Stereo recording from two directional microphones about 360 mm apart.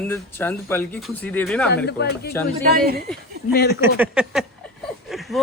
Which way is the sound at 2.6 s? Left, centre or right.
Right.